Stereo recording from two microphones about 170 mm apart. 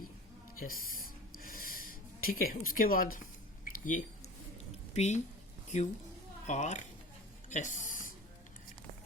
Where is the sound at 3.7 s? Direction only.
50° left (ahead or behind).